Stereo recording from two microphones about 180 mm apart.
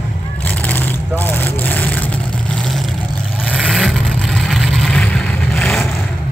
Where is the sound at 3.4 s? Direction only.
Centre (ahead or behind).